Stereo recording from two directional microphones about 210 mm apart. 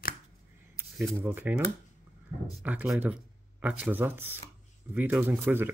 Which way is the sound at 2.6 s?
10° right (ahead or behind).